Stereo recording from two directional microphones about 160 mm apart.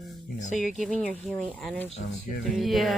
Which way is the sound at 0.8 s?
5° left (ahead or behind).